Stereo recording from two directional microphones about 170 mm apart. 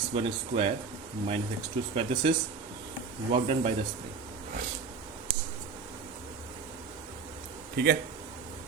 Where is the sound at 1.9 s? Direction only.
30° right (ahead or behind).